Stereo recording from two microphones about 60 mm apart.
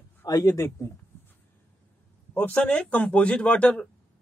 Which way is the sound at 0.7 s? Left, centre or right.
Left.